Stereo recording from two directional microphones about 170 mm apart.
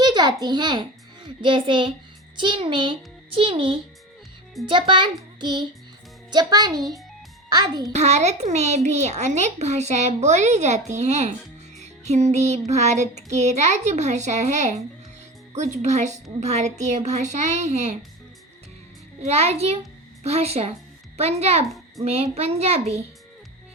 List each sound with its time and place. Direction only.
0.0 s a child's voice: 25° right (ahead or behind)
7.9 s a child's voice: 40° right (ahead or behind)
11.8 s music: 40° right (ahead or behind)
19.2 s a child's voice: 40° right (ahead or behind)